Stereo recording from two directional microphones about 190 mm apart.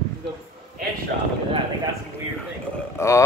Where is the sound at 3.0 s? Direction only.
15° left (ahead or behind).